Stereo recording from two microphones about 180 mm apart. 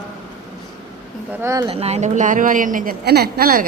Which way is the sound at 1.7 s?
35° right (ahead or behind).